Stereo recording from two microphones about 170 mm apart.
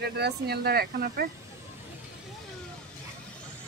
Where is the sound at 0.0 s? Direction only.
70° right (ahead or behind).